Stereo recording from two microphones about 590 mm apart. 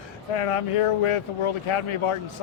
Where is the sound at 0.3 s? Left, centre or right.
Left.